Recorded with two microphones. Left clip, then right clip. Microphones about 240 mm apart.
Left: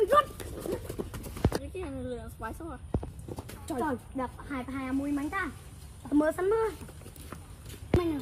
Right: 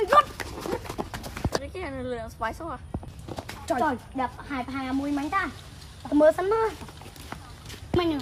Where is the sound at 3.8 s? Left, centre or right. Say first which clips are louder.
Right 4 dB; right.